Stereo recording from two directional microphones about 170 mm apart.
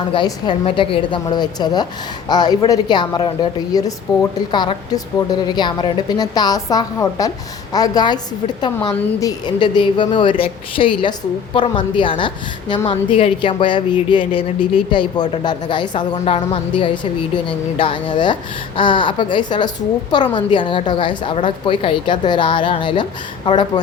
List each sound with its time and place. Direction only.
0.1 s a woman's voice: 25° left (ahead or behind)